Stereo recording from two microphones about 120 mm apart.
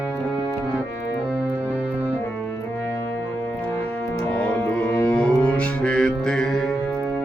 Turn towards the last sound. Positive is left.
turn(degrees=5)  # may be behind; listen again after turning